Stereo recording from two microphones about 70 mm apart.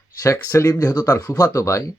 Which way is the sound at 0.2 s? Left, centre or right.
Left.